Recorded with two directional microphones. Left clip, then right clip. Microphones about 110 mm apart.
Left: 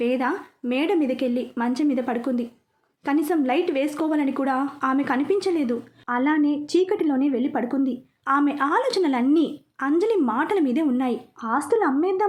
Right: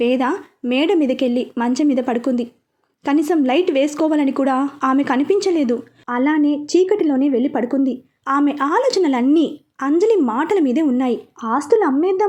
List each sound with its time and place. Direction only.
0.0 s speech: 50° right (ahead or behind)
6.1 s a woman's voice: 25° right (ahead or behind)